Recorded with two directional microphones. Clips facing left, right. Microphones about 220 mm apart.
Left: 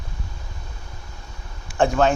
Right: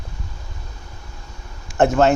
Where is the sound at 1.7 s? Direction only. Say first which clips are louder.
Right 3 dB; 20° right (ahead or behind).